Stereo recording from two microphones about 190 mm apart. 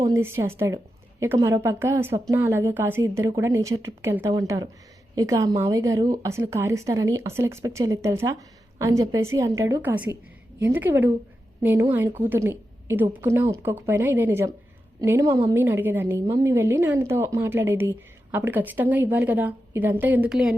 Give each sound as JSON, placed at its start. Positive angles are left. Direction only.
{"t": 0.0, "sound": "speech", "side_deg": -15}